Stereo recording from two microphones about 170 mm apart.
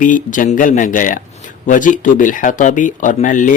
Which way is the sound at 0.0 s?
50° left (ahead or behind).